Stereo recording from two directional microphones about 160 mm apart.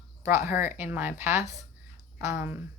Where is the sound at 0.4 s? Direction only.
15° right (ahead or behind).